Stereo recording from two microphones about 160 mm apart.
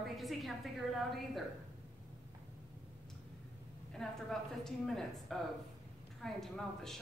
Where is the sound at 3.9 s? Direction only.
5° left (ahead or behind).